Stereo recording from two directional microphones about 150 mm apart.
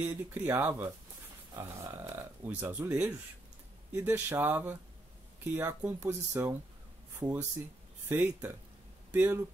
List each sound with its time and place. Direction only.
0.0 s speech: 15° right (ahead or behind)